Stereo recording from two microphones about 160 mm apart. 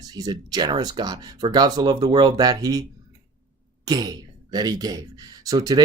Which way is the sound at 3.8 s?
25° right (ahead or behind).